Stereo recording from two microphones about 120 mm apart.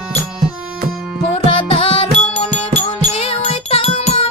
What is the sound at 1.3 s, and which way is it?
Music, 50° left (ahead or behind).